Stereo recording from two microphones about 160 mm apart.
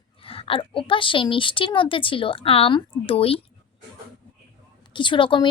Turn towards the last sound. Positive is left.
turn(degrees=30)  # may be behind; listen again after turning